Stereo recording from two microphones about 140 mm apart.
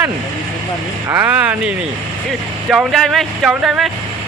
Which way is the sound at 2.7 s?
Centre (ahead or behind).